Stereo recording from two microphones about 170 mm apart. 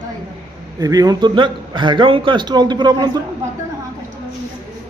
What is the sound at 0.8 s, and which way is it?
Speech, 20° right (ahead or behind).